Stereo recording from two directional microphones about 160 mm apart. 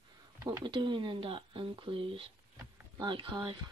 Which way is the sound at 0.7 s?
30° right (ahead or behind).